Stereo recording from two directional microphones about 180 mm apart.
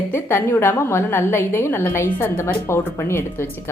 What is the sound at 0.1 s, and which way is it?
A woman's voice, 15° left (ahead or behind).